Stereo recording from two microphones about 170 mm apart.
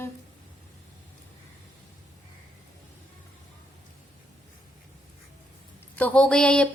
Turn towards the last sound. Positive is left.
turn(degrees=5)  # may be behind; listen again after turning